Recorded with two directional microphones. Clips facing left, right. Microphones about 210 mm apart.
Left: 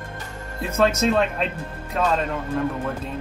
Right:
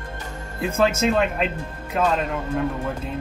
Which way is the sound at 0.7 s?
5° right (ahead or behind).